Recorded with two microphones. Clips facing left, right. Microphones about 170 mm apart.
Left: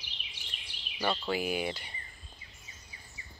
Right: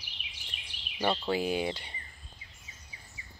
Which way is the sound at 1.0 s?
25° right (ahead or behind).